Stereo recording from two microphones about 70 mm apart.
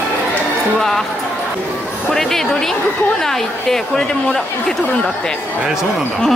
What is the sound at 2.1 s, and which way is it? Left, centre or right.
A woman's voice, centre.